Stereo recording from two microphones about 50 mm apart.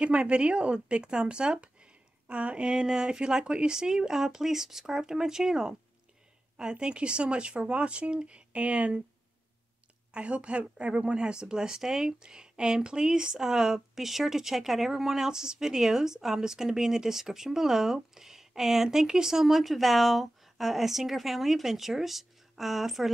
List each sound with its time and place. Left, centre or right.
0.0 s a woman's voice: right
10.1 s a woman's voice: right; by 23.1 s centre